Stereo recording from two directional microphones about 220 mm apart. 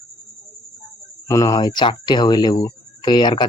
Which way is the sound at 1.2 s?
15° left (ahead or behind).